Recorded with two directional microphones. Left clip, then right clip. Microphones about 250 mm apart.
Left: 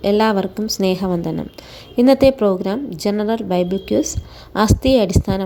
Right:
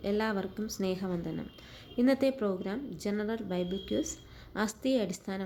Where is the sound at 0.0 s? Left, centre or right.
Left.